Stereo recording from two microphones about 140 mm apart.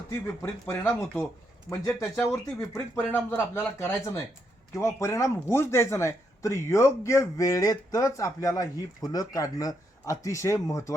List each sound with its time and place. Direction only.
0.7 s speech: 15° left (ahead or behind)